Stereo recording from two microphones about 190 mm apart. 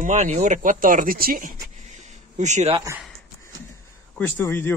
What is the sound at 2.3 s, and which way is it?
Speech, 40° right (ahead or behind).